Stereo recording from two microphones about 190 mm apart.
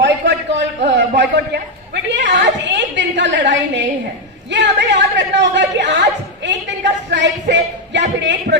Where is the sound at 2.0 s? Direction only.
70° right (ahead or behind).